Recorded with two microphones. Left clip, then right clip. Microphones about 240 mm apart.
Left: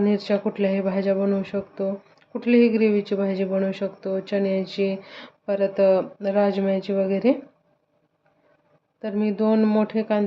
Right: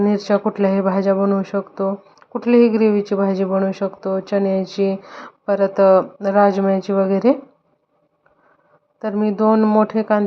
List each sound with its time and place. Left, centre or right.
0.0 s speech: centre
9.0 s speech: centre